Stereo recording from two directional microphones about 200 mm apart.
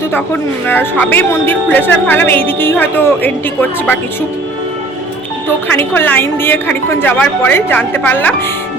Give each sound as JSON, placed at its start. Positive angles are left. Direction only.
{"t": 0.7, "sound": "speech", "side_deg": 10}
{"t": 5.7, "sound": "speech", "side_deg": 10}